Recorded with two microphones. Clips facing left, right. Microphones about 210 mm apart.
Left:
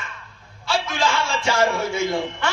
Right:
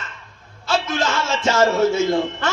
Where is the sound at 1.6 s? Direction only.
10° left (ahead or behind).